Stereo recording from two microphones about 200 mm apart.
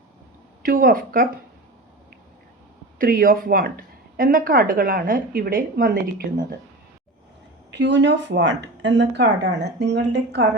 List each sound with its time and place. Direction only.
0.6 s a woman's voice: 45° right (ahead or behind)
3.0 s a woman's voice: 45° right (ahead or behind)
7.7 s a woman's voice: 60° right (ahead or behind)